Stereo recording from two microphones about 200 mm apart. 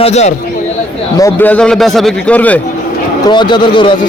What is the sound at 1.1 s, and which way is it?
A man's voice, 15° left (ahead or behind).